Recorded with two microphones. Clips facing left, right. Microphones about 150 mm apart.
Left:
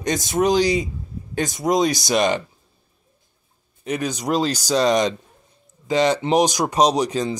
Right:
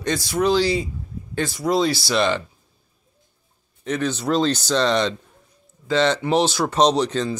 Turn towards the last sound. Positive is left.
turn(degrees=10)  # may be behind; listen again after turning